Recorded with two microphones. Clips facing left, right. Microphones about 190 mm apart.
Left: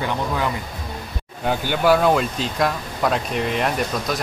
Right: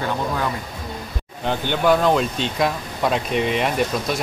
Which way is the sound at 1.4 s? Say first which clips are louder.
Left 1 dB; 5° left (ahead or behind).